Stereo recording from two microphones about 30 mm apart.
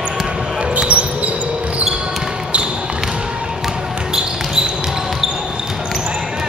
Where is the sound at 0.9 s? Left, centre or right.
Right.